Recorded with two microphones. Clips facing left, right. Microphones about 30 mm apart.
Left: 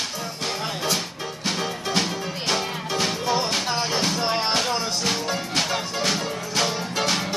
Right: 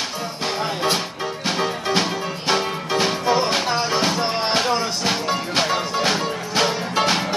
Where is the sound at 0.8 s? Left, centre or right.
Centre.